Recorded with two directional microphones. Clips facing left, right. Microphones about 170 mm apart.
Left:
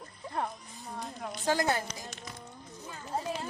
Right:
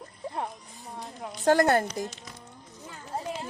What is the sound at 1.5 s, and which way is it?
Speech, 55° right (ahead or behind).